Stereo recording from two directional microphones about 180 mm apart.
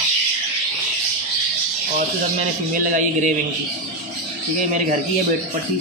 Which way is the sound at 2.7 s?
45° right (ahead or behind).